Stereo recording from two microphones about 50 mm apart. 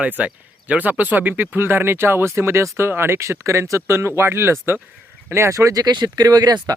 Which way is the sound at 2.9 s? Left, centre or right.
Right.